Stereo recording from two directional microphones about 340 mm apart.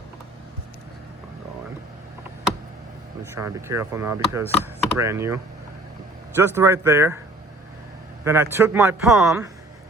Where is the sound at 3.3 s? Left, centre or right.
Centre.